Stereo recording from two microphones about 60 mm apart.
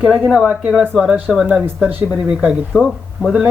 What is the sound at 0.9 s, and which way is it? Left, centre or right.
Speech, centre.